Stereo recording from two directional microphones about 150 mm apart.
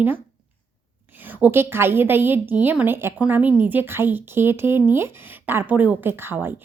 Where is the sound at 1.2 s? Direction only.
15° right (ahead or behind).